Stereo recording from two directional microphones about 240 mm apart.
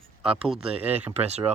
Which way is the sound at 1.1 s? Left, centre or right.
Right.